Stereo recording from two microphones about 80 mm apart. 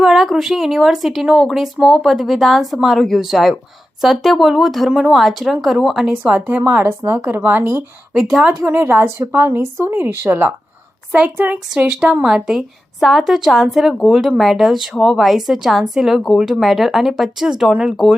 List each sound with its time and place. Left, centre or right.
0.0 s a woman's voice: centre
6.5 s speech: right
8.2 s a woman's voice: centre
8.6 s speech: right
11.9 s a woman's voice: centre